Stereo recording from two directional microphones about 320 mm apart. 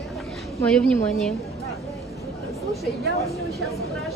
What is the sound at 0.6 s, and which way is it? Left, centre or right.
Speech, centre.